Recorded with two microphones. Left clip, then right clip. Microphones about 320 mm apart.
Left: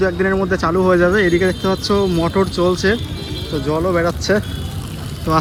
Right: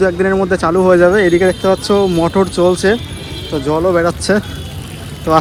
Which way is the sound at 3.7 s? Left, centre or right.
Right.